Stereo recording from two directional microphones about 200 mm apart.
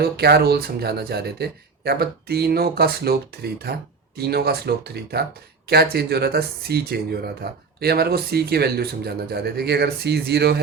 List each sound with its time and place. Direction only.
0.0 s speech: 50° right (ahead or behind)